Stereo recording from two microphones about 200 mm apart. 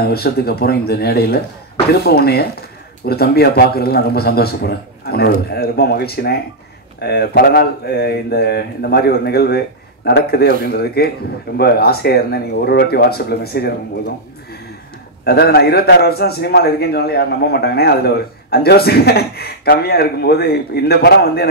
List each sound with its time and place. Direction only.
0.0 s a man's voice: 50° left (ahead or behind)
15.2 s a man's voice: 50° left (ahead or behind)